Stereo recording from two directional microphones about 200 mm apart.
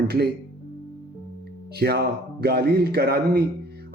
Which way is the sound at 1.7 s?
55° right (ahead or behind).